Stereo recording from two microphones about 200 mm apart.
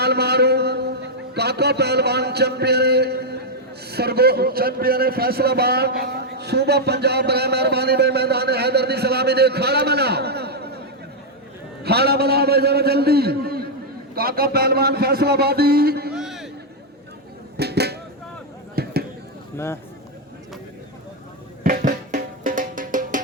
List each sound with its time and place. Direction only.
0.0 s a man's voice: 55° right (ahead or behind)
11.8 s a man's voice: 55° right (ahead or behind)
16.1 s a sound: centre (ahead or behind)
17.6 s a sound: 55° right (ahead or behind)
19.5 s speech: 15° left (ahead or behind)
21.6 s music: 45° right (ahead or behind)